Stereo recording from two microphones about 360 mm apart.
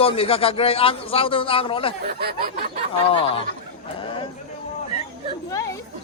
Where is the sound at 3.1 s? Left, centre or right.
Centre.